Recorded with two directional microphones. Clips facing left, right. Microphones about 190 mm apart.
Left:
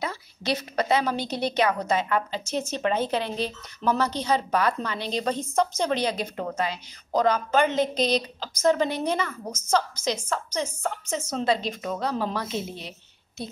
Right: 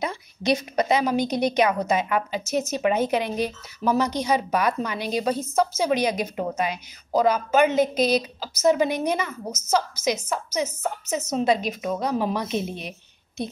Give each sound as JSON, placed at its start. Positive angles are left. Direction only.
{"t": 0.0, "sound": "speech", "side_deg": -15}